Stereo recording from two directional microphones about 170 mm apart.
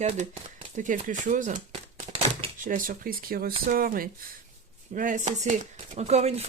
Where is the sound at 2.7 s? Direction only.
55° right (ahead or behind).